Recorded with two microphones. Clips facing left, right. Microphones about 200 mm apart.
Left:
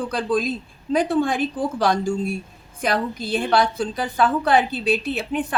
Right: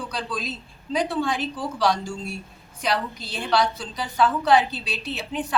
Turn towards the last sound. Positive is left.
turn(degrees=55)  # may be behind; listen again after turning